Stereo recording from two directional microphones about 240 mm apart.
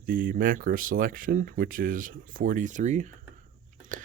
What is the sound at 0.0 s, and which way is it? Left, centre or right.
Speech, right.